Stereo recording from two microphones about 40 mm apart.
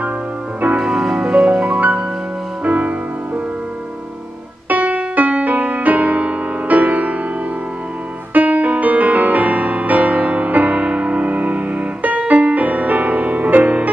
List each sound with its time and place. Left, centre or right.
0.7 s music: centre
1.1 s music: right
4.6 s music: right
8.3 s music: right